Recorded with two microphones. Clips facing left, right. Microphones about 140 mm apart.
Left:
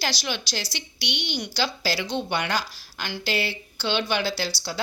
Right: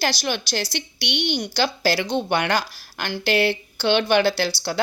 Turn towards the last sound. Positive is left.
turn(degrees=-60)  # may be behind; listen again after turning